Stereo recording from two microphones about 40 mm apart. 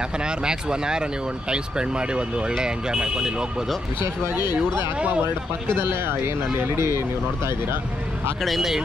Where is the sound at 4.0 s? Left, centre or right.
Right.